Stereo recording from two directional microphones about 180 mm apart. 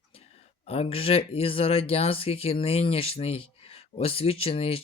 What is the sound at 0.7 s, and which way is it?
Speech, 35° left (ahead or behind).